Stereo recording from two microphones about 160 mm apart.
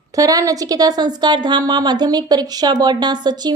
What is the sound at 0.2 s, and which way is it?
A woman's voice, 20° right (ahead or behind).